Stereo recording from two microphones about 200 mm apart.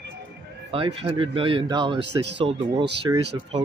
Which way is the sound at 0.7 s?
25° right (ahead or behind).